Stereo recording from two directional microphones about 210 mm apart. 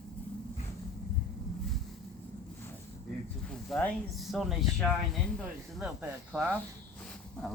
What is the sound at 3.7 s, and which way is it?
Speech, centre (ahead or behind).